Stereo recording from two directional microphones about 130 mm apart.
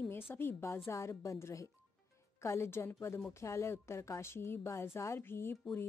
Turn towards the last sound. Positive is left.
turn(degrees=20)  # may be behind; listen again after turning